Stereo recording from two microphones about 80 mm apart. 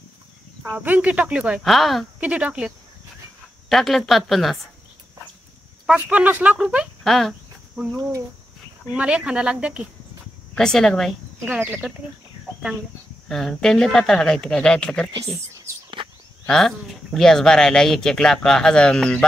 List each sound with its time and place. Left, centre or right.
0.7 s speech: centre
1.6 s a woman's voice: centre
2.1 s speech: centre
3.6 s a woman's voice: centre
5.9 s speech: centre
7.0 s speech: centre
8.9 s speech: centre
10.5 s speech: centre
13.3 s speech: centre
16.4 s speech: centre